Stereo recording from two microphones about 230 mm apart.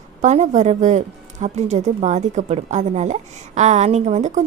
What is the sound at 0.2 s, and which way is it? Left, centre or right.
Speech, right.